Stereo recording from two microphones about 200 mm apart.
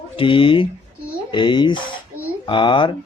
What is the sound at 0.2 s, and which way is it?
Speech, 25° left (ahead or behind).